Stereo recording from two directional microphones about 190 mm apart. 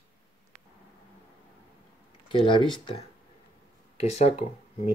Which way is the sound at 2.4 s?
25° left (ahead or behind).